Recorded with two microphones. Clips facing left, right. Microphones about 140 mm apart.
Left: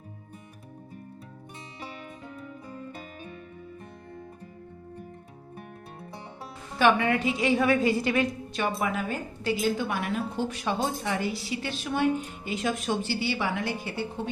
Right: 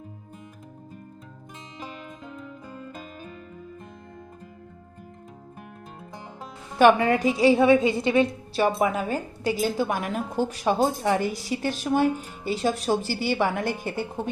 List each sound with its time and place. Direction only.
6.7 s a woman's voice: 45° right (ahead or behind)